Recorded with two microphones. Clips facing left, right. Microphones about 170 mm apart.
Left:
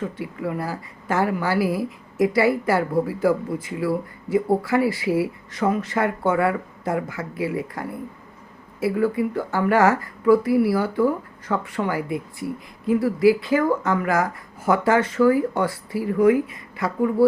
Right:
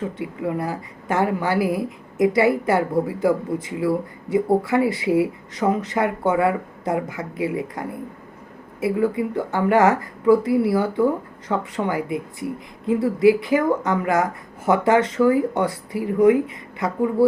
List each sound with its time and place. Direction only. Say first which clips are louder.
0.2 s speech: right 2 dB; 20° right (ahead or behind)